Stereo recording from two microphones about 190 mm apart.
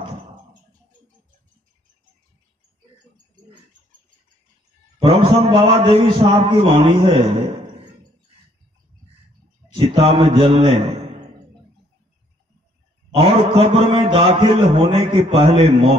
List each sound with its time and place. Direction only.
5.0 s a man's voice: 30° right (ahead or behind)
9.7 s a man's voice: 30° right (ahead or behind)
13.2 s a man's voice: 30° right (ahead or behind)